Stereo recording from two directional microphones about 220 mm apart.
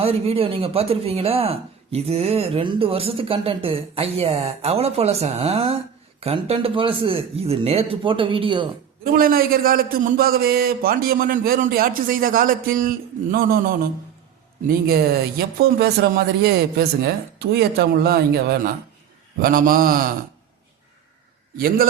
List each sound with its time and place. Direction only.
0.0 s speech: 25° right (ahead or behind)
9.1 s a man's voice: 40° right (ahead or behind)
15.4 s a man's voice: 45° right (ahead or behind)